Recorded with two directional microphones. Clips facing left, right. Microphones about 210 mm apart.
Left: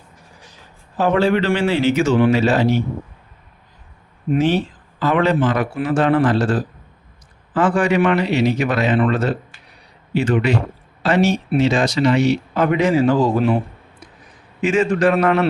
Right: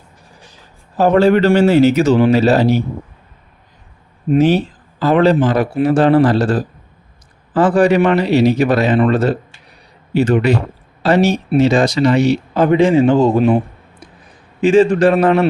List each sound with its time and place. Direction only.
0.9 s speech: 40° right (ahead or behind)
4.4 s speech: 40° right (ahead or behind); by 13.6 s 20° right (ahead or behind)
14.6 s speech: 30° right (ahead or behind)